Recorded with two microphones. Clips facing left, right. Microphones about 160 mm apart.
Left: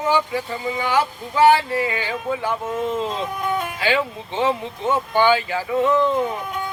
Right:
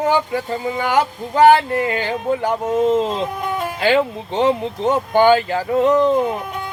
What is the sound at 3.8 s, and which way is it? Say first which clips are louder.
Speech: right 9 dB; 50° right (ahead or behind).